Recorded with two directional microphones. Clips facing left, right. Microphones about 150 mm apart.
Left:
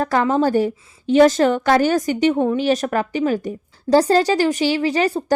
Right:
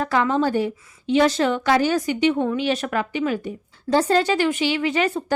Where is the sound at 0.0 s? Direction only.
45° left (ahead or behind).